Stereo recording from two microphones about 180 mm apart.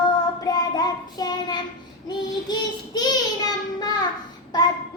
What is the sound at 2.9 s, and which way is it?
Child singing, 20° left (ahead or behind).